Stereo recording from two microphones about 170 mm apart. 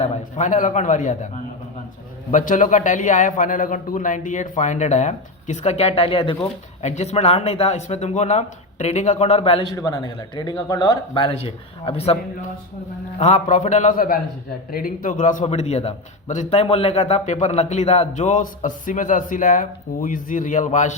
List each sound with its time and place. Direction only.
0.0 s a man's voice: 40° left (ahead or behind)
2.3 s a man's voice: 50° left (ahead or behind); by 9.7 s 35° left (ahead or behind)
9.7 s speech: 20° left (ahead or behind)
13.1 s a man's voice: 40° left (ahead or behind)